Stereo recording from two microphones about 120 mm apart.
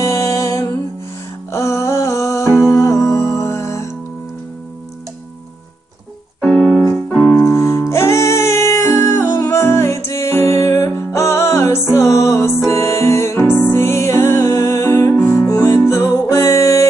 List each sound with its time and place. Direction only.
0.0 s music: 25° left (ahead or behind)
6.4 s keyboard: 5° left (ahead or behind)
7.1 s music: 10° left (ahead or behind)
7.4 s music: 25° left (ahead or behind)